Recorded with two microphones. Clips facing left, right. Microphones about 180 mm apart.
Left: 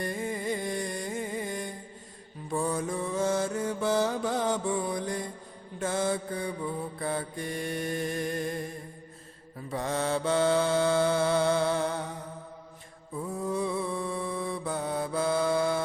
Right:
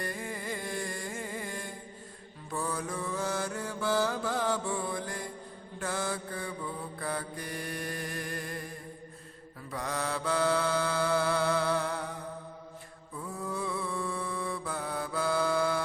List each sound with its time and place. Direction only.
0.0 s music: 20° left (ahead or behind)
2.5 s mantra: 25° left (ahead or behind)
9.6 s mantra: 25° left (ahead or behind)
13.1 s mantra: 20° left (ahead or behind)